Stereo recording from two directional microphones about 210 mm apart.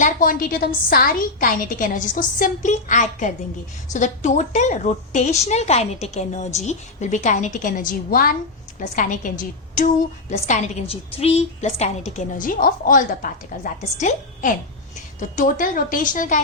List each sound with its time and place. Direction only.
0.0 s a woman's voice: 40° left (ahead or behind)